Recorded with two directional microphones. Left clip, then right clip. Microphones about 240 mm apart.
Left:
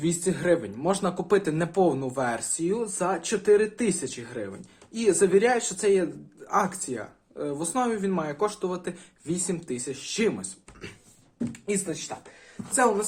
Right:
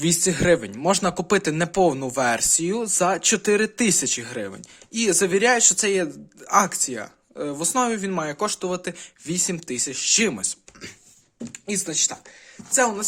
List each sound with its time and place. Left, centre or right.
0.0 s speech: right
11.5 s speech: right